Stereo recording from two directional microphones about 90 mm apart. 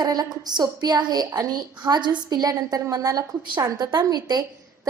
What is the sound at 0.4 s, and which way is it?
A woman's voice, 50° right (ahead or behind).